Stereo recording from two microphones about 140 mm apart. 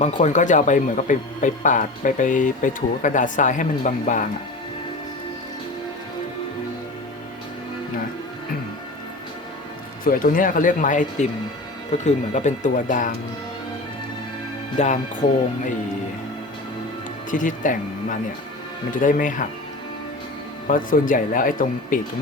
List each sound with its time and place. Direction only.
0.0 s speech: 60° left (ahead or behind)
10.0 s speech: 80° left
14.8 s speech: 60° left (ahead or behind)
17.3 s speech: 70° left (ahead or behind)
20.7 s speech: 75° left (ahead or behind)